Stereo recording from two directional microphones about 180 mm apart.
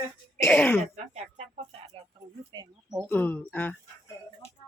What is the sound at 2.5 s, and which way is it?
Speech, 20° right (ahead or behind).